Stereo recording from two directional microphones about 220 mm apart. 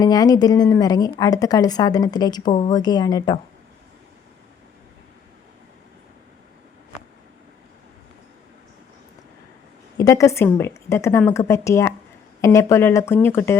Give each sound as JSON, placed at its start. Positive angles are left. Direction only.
{"t": 0.0, "sound": "a woman's voice", "side_deg": 15}
{"t": 10.0, "sound": "a woman's voice", "side_deg": 15}